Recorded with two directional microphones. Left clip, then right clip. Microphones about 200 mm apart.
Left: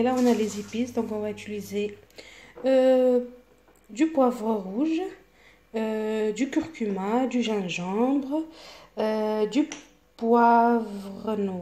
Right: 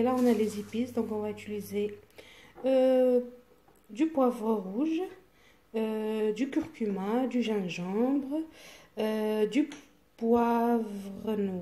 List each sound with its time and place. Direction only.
0.0 s speech: centre (ahead or behind)
8.5 s speech: 30° left (ahead or behind)
9.2 s speech: 5° right (ahead or behind)